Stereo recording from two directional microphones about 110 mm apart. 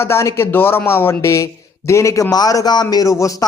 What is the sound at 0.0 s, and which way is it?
A man's voice, 25° left (ahead or behind).